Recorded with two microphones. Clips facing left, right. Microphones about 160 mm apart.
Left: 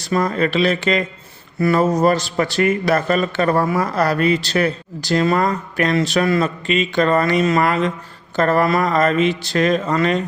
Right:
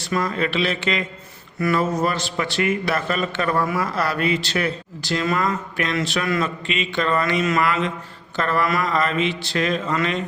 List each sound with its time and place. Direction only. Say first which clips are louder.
0.0 s speech: left 4 dB; 40° left (ahead or behind)